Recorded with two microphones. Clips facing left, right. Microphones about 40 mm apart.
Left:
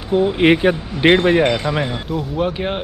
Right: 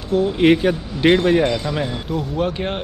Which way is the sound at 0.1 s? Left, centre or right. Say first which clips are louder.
Left 1 dB; left.